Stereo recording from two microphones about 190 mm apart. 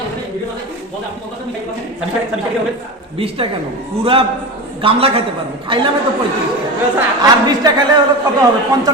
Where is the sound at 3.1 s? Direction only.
30° right (ahead or behind).